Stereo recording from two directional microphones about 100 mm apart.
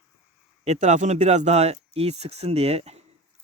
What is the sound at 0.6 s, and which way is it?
Speech, 90° right.